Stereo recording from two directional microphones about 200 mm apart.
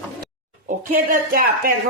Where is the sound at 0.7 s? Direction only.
40° right (ahead or behind).